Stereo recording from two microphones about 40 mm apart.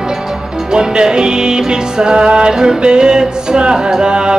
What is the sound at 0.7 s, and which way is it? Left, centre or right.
Music, centre.